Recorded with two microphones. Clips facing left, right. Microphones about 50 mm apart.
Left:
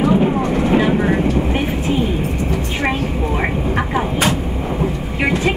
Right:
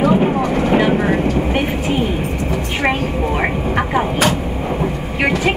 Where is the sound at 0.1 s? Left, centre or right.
Centre.